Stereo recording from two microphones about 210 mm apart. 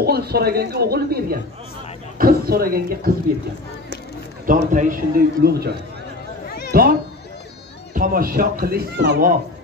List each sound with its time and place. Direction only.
0.0 s speech: 50° right (ahead or behind)
4.5 s speech: 40° right (ahead or behind)